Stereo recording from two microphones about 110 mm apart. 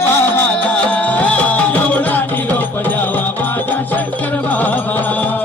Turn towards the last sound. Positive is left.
turn(degrees=15)  # may be behind; listen again after turning